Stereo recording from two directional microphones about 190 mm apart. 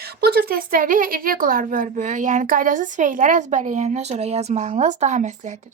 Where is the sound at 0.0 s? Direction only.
55° right (ahead or behind).